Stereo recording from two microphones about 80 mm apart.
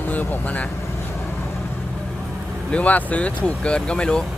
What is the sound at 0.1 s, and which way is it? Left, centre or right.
Speech, left.